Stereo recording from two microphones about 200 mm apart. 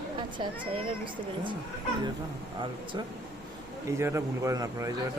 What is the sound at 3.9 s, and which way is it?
Speech, 15° right (ahead or behind).